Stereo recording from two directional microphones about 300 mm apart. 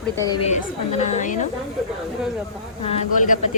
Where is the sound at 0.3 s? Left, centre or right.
Left.